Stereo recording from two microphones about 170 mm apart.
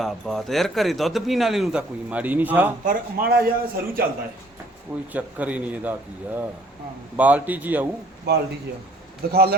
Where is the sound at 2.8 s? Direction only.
65° right (ahead or behind).